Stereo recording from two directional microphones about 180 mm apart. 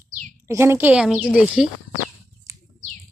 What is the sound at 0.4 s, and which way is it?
A woman's voice, 15° right (ahead or behind).